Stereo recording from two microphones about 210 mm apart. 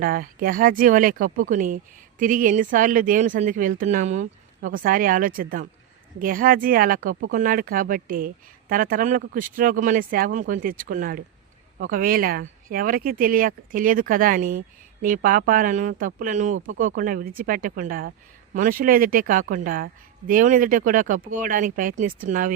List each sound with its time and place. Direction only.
0.0 s speech: 40° right (ahead or behind)